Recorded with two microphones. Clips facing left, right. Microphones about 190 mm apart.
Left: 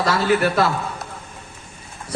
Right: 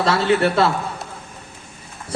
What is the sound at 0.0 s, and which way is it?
Speech, 25° right (ahead or behind).